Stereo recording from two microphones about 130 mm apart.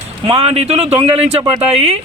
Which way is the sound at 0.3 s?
50° right (ahead or behind).